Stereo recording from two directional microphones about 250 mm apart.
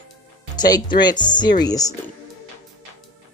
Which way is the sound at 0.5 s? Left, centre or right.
Centre.